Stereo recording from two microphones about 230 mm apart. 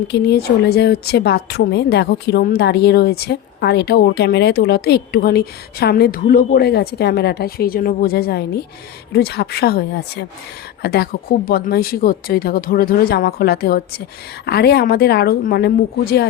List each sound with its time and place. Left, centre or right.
0.1 s a woman's voice: left